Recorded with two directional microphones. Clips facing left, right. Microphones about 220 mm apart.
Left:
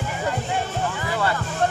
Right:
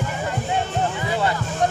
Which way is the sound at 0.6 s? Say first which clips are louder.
Right 2 dB; 20° right (ahead or behind).